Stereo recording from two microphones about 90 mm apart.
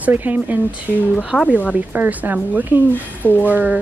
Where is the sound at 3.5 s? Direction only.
20° right (ahead or behind).